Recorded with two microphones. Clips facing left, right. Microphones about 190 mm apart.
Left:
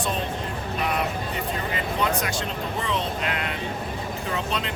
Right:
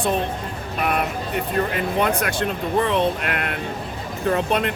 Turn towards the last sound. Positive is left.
turn(degrees=-55)  # may be behind; listen again after turning